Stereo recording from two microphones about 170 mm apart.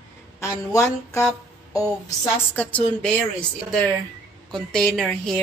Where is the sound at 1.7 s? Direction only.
20° left (ahead or behind).